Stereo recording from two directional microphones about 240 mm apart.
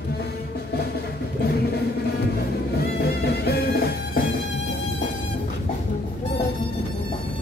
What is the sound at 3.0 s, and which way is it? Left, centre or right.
Music, left.